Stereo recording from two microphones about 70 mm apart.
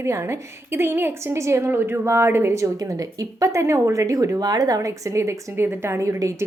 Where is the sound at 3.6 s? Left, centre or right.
Right.